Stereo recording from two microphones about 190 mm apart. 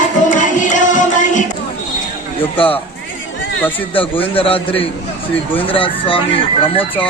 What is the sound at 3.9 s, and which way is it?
Speech, 30° left (ahead or behind).